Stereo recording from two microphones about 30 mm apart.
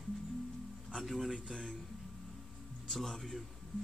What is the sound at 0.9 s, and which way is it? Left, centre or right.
Music, centre.